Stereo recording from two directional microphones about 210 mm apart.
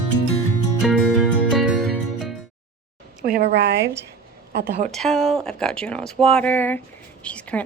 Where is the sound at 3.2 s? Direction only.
45° right (ahead or behind).